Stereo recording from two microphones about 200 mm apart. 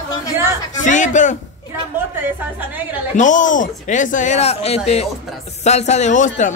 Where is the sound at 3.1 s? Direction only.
40° left (ahead or behind).